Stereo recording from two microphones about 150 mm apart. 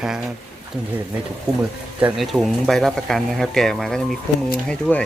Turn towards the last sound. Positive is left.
turn(degrees=10)  # may be behind; listen again after turning